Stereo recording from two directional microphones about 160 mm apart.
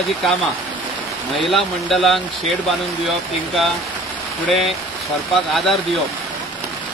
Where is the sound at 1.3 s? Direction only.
Centre (ahead or behind).